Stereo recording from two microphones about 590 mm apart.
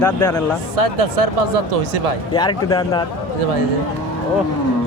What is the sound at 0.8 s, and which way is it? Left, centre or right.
Speech, right.